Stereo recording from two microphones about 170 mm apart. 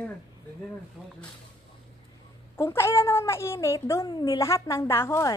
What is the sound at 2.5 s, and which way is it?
Speech, 15° left (ahead or behind).